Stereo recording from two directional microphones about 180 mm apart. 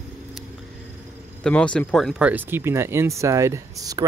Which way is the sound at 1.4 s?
5° left (ahead or behind).